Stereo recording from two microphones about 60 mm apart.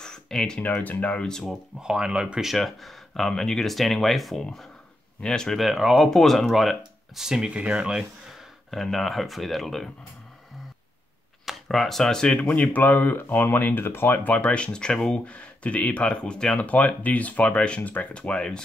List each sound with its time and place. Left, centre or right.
0.0 s a sound: centre
0.6 s speech: left
1.4 s speech: centre
2.5 s speech: centre
5.6 s speech: centre
8.6 s speech: centre
11.6 s speech: centre